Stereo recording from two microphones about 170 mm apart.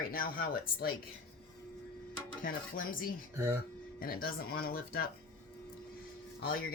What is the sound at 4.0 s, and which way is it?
Speech, 60° left (ahead or behind).